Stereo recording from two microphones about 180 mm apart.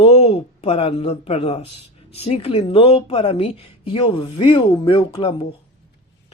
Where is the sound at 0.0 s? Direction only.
35° left (ahead or behind).